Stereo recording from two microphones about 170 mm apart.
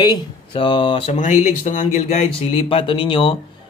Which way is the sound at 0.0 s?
30° left (ahead or behind).